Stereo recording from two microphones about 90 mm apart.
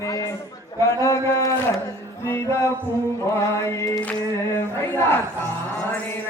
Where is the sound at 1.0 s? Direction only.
35° left (ahead or behind).